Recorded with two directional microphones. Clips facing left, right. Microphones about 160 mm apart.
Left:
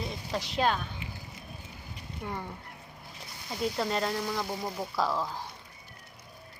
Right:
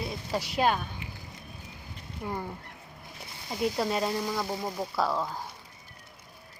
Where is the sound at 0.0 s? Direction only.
10° right (ahead or behind).